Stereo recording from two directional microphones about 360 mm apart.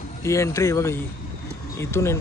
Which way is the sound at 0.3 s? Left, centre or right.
Centre.